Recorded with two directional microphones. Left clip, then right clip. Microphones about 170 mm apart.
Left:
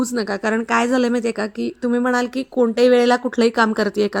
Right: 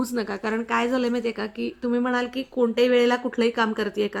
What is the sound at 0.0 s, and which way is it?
A woman's voice, 40° left (ahead or behind).